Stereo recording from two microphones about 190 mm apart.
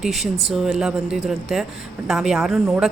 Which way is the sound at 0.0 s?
Centre (ahead or behind).